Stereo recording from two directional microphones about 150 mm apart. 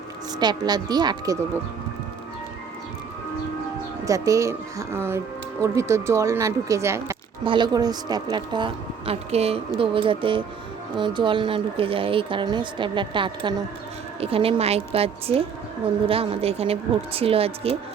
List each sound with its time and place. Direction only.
0.3 s speech: 30° right (ahead or behind)
4.0 s speech: 20° right (ahead or behind)
7.4 s a woman's voice: 30° right (ahead or behind)